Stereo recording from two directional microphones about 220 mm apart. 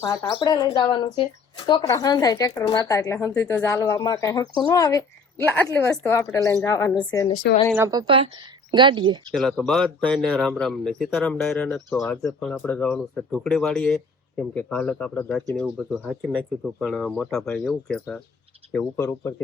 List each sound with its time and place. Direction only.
0.0 s speech: 20° left (ahead or behind)
7.8 s speech: 15° right (ahead or behind)
9.3 s speech: centre (ahead or behind)